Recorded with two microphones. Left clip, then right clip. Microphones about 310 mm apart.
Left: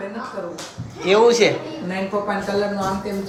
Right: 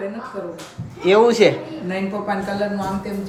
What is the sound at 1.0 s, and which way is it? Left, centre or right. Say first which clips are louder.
Speech: right 1 dB; centre.